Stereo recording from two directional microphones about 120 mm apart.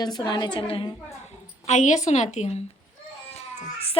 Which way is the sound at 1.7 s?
80° left.